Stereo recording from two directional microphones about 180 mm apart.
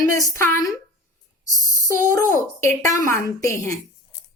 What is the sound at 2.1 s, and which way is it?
A woman's voice, 15° left (ahead or behind).